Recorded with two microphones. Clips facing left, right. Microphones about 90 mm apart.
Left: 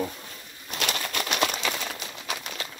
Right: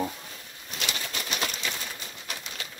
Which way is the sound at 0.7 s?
60° left (ahead or behind).